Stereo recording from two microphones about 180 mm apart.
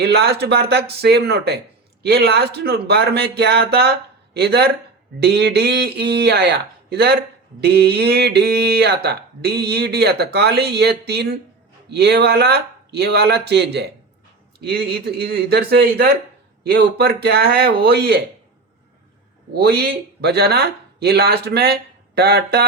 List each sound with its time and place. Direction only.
0.0 s mantra: 65° right (ahead or behind)
19.5 s mantra: 60° right (ahead or behind)